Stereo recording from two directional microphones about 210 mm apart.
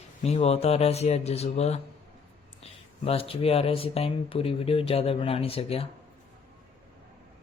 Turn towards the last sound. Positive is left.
turn(degrees=25)  # may be behind; listen again after turning